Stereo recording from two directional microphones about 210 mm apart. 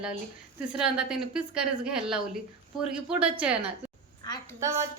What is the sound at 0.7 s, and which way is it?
A woman's voice, 5° right (ahead or behind).